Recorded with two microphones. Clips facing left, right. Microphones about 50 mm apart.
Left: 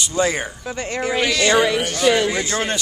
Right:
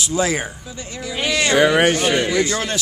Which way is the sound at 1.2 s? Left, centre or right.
Right.